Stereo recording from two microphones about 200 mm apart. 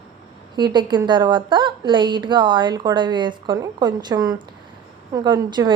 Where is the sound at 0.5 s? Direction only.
20° right (ahead or behind).